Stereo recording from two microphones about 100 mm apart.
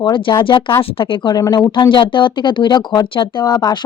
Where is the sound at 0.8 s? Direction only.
65° left (ahead or behind).